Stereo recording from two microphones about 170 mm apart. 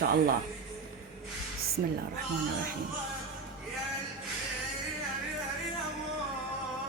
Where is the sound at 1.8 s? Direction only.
60° right (ahead or behind).